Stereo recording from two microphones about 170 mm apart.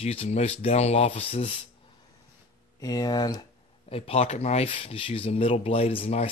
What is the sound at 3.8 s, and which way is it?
Speech, 35° left (ahead or behind).